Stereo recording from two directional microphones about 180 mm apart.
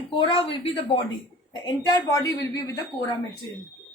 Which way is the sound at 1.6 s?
20° left (ahead or behind).